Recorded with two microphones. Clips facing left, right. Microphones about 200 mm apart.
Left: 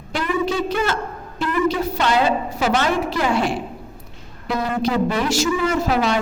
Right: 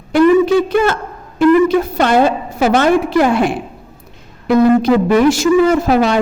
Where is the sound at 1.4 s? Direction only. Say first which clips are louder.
Right 10 dB; 55° right (ahead or behind).